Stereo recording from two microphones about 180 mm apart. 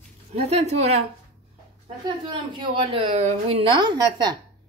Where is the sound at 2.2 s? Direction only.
25° right (ahead or behind).